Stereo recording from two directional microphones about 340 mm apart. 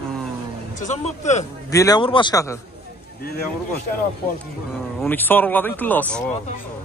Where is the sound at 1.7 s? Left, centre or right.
Centre.